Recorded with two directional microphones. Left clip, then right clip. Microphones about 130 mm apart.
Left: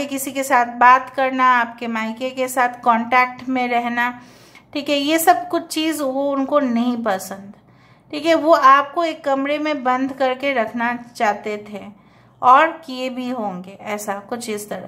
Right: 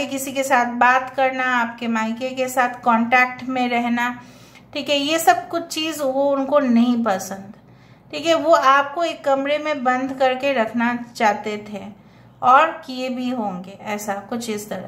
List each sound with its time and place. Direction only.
0.0 s a woman's voice: 35° left (ahead or behind)